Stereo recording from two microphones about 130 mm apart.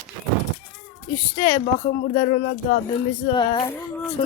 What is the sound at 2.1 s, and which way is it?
Speech, 45° left (ahead or behind).